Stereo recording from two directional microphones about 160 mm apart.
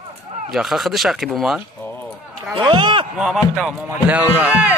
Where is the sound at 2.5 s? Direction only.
30° right (ahead or behind).